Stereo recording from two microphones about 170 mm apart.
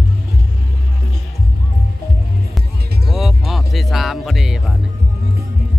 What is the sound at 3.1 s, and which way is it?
Music, centre (ahead or behind).